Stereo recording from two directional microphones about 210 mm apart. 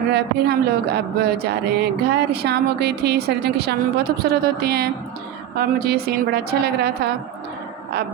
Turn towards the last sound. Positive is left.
turn(degrees=-50)  # may be behind; listen again after turning